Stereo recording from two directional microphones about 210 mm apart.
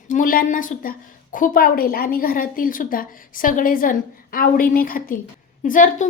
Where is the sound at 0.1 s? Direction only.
40° left (ahead or behind).